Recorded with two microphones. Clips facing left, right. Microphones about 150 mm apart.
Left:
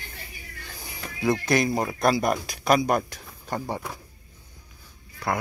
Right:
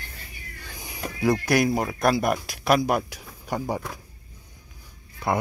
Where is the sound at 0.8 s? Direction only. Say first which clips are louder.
Right 4 dB; 15° right (ahead or behind).